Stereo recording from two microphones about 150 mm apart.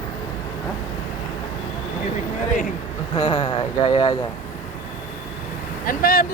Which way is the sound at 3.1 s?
35° left (ahead or behind).